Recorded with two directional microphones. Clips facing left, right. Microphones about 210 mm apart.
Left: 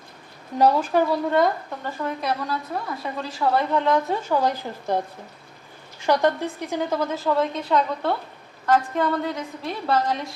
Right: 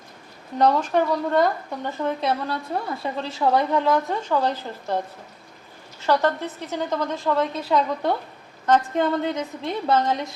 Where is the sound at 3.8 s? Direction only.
Centre (ahead or behind).